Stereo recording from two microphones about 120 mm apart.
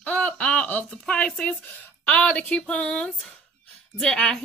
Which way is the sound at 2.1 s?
10° left (ahead or behind).